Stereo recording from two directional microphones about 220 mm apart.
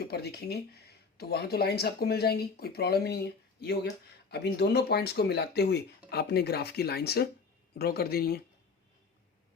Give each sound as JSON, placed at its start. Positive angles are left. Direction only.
{"t": 0.1, "sound": "speech", "side_deg": 45}